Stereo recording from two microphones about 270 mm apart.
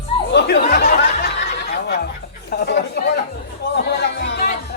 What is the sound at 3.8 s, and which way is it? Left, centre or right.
Music, left.